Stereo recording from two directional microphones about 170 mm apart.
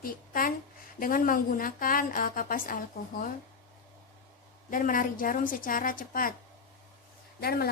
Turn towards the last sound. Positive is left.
turn(degrees=65)  # may be behind; listen again after turning